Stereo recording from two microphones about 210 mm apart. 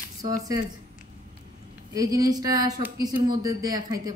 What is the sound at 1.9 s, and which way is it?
A woman's voice, 15° right (ahead or behind).